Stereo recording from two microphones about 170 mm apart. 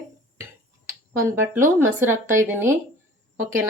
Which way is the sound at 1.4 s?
15° right (ahead or behind).